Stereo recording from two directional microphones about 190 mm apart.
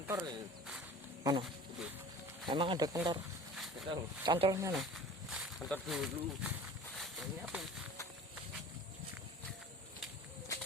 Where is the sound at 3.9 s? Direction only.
25° right (ahead or behind).